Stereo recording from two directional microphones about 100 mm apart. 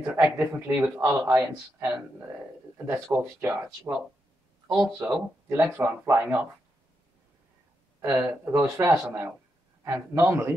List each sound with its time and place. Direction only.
0.0 s speech: 20° right (ahead or behind)
1.0 s speech: 30° right (ahead or behind)
5.1 s speech: 20° right (ahead or behind)
8.0 s speech: 25° right (ahead or behind)